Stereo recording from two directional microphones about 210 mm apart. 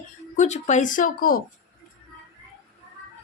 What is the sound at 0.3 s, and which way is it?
Speech, 35° left (ahead or behind).